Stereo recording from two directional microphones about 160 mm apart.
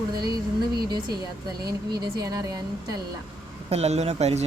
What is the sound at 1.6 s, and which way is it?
Speech, 25° right (ahead or behind).